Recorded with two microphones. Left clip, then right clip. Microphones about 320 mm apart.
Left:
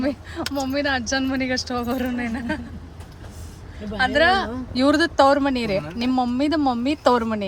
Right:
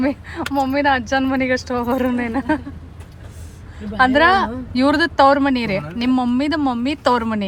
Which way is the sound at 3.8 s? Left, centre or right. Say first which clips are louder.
Right 5 dB; centre.